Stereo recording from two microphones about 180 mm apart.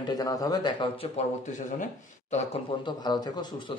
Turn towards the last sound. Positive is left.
turn(degrees=25)  # may be behind; listen again after turning